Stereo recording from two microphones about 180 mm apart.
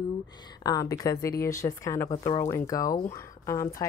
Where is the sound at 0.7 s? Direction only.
20° left (ahead or behind).